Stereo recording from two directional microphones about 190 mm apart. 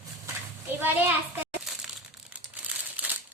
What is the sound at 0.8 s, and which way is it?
Speech, 10° right (ahead or behind).